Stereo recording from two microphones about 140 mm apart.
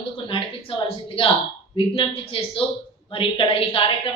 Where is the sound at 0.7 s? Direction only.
40° left (ahead or behind).